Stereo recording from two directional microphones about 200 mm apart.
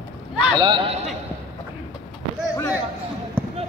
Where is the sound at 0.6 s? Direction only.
25° right (ahead or behind).